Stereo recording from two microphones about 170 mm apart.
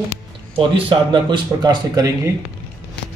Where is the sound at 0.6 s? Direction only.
30° right (ahead or behind).